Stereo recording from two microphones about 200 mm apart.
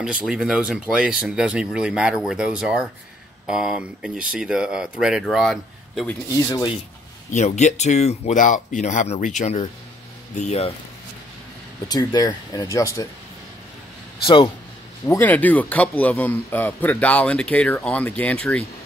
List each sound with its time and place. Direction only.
0.0 s speech: 5° right (ahead or behind)
6.3 s speech: 15° left (ahead or behind)
7.3 s speech: 35° left (ahead or behind)
11.9 s speech: 20° left (ahead or behind)
14.2 s speech: 25° left (ahead or behind)
15.0 s speech: 10° left (ahead or behind)